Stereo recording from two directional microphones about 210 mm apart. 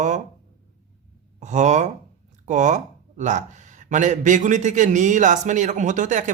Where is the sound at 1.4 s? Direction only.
35° right (ahead or behind).